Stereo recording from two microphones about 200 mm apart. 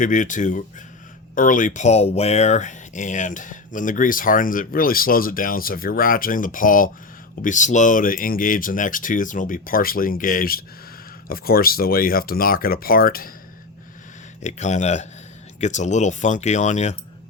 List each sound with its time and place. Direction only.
0.0 s speech: 40° left (ahead or behind)
14.4 s speech: 35° left (ahead or behind)